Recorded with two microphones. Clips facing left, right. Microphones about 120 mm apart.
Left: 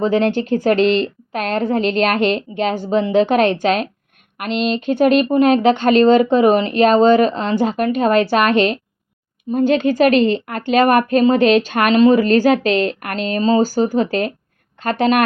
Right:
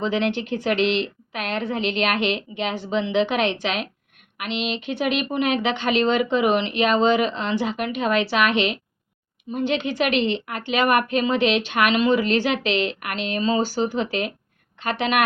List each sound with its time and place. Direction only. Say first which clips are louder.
0.0 s a woman's voice: left 7 dB; 45° left (ahead or behind)